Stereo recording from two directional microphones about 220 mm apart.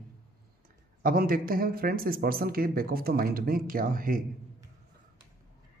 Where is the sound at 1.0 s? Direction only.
40° right (ahead or behind).